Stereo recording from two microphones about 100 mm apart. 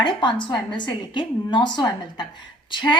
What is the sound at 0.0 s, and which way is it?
A woman's voice, 50° left (ahead or behind).